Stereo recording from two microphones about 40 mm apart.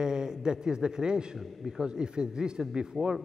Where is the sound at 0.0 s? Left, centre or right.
Centre.